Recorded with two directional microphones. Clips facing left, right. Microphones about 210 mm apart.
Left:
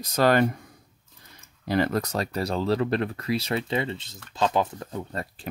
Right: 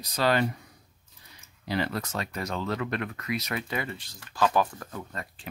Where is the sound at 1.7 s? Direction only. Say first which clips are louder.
Left 6 dB; 45° left (ahead or behind).